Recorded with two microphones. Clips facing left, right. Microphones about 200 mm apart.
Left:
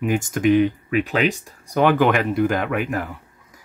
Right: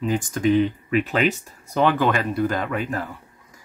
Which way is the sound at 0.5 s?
10° left (ahead or behind).